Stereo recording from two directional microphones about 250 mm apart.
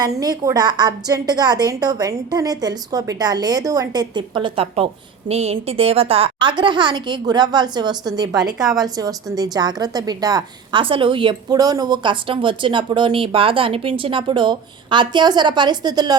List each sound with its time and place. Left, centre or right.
0.2 s a woman's voice: centre
8.5 s a woman's voice: centre
8.8 s a woman's voice: centre